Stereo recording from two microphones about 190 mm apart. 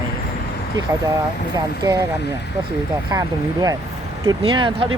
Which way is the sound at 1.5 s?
20° right (ahead or behind).